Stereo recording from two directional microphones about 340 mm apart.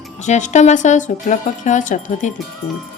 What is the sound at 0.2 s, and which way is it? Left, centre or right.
Speech, left.